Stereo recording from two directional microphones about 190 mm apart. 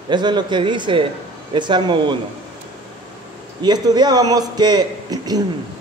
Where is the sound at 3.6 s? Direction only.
20° right (ahead or behind).